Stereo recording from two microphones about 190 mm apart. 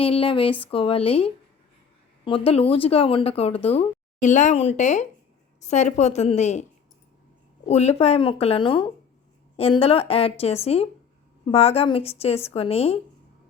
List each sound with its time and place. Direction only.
0.0 s speech: 30° left (ahead or behind)
7.7 s speech: 35° left (ahead or behind)